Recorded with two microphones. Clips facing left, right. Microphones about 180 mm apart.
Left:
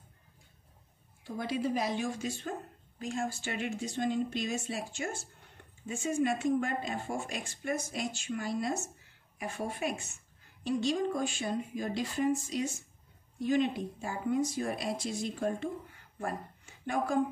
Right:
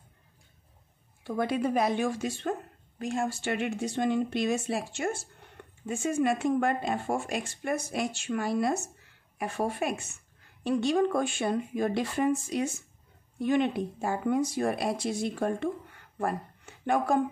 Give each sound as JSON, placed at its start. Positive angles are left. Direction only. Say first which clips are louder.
{"t": 1.2, "sound": "speech", "louder": "right 5 dB", "side_deg": -60}